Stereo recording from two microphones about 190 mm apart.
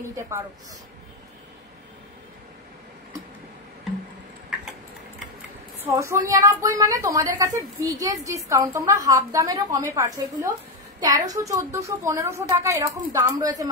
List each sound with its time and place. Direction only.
5.8 s a woman's voice: 15° right (ahead or behind)